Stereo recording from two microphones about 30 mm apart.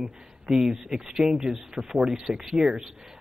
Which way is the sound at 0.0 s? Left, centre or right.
Right.